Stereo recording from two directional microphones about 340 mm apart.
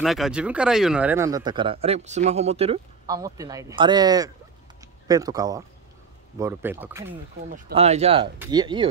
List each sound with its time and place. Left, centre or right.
0.0 s speech: centre
7.5 s speech: centre